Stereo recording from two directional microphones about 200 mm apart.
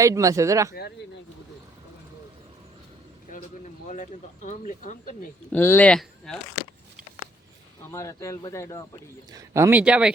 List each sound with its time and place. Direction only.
0.0 s speech: 15° right (ahead or behind)
0.7 s speech: 55° left (ahead or behind)
3.8 s speech: 40° left (ahead or behind)
5.5 s speech: 10° left (ahead or behind)
7.9 s speech: 15° left (ahead or behind)
9.3 s speech: 15° right (ahead or behind)